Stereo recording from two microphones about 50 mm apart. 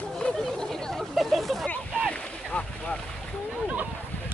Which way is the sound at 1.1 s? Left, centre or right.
Centre.